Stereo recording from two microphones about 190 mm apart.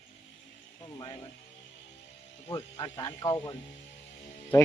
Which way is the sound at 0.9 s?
20° left (ahead or behind).